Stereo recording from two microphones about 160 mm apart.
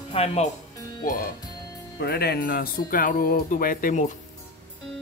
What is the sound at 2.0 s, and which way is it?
Speech, 85° left.